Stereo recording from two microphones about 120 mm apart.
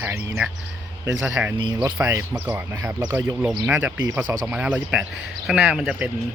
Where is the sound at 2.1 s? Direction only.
25° right (ahead or behind).